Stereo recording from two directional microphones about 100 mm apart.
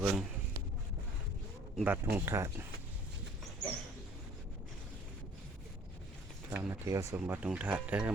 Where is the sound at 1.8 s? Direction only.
20° right (ahead or behind).